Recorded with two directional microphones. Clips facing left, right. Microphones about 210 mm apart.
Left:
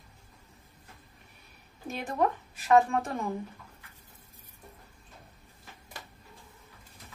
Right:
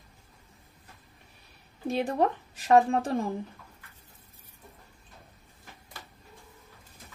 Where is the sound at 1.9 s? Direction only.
30° right (ahead or behind).